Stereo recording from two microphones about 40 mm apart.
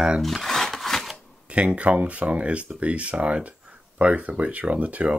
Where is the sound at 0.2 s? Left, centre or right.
Centre.